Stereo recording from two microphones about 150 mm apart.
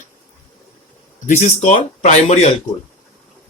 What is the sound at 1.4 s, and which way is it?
Speech, 50° left (ahead or behind).